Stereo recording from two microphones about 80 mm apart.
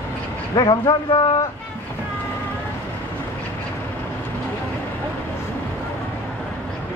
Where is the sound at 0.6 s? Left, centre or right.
Left.